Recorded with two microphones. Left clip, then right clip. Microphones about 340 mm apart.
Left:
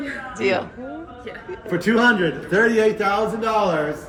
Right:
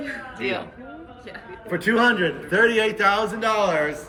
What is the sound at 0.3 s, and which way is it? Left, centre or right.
Speech, centre.